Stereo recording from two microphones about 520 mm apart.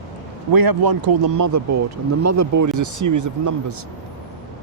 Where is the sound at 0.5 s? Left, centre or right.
Right.